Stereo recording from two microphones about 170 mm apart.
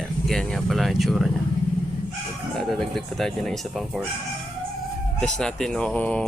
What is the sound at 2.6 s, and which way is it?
Speech, centre (ahead or behind).